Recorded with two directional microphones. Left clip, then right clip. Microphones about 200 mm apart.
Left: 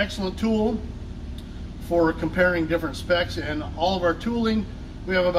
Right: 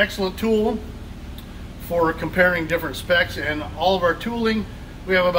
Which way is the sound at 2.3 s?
20° right (ahead or behind).